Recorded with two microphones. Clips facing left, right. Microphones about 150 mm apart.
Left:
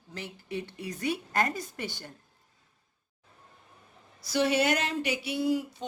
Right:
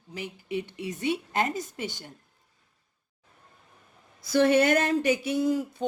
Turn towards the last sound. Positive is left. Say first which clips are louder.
# right 3 dB
turn(degrees=-45)  # may be behind; listen again after turning